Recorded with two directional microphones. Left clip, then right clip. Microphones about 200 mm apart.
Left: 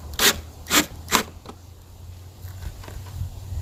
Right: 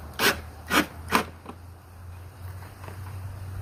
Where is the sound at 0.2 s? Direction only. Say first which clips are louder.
Left 4 dB; 35° left (ahead or behind).